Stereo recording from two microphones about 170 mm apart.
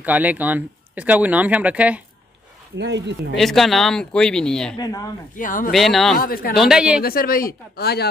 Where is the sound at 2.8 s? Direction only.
90° right.